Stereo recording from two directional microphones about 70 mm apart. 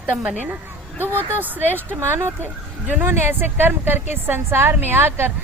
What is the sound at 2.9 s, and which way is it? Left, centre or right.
A woman's voice, right.